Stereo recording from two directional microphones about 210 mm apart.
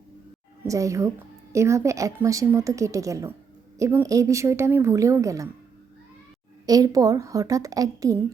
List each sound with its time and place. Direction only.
0.6 s a woman's voice: 15° right (ahead or behind)
6.7 s a woman's voice: 15° right (ahead or behind)